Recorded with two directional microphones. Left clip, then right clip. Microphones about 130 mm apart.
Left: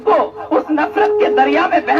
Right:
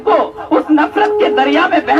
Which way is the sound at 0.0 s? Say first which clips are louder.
Right 1 dB; 25° left (ahead or behind).